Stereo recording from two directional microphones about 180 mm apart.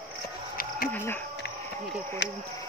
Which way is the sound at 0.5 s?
55° left (ahead or behind).